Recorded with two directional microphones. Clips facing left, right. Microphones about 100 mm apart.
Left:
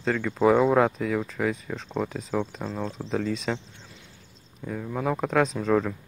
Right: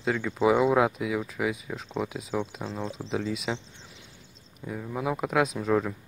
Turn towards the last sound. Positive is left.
turn(degrees=-5)  # may be behind; listen again after turning